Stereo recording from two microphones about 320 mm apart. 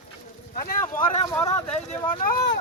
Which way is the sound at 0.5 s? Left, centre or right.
Left.